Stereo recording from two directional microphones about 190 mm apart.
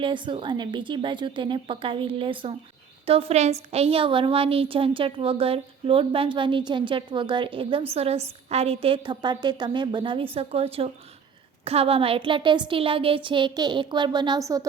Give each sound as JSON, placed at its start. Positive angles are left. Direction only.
{"t": 0.0, "sound": "a woman's voice", "side_deg": -25}